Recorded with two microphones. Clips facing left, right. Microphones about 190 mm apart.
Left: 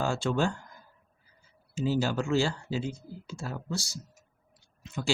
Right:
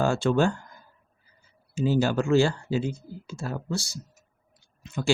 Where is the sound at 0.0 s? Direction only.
60° right (ahead or behind).